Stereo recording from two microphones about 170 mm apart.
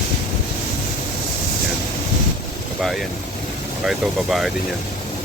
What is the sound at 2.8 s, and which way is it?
Speech, centre (ahead or behind).